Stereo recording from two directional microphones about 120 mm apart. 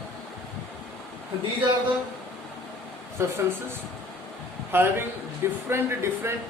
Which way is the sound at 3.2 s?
25° right (ahead or behind).